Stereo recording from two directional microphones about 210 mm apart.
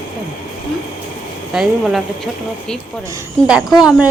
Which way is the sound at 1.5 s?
Centre (ahead or behind).